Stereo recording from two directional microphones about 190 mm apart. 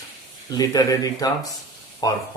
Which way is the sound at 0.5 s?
20° left (ahead or behind).